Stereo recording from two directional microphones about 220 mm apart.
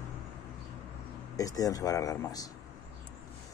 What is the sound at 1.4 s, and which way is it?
Speech, 15° left (ahead or behind).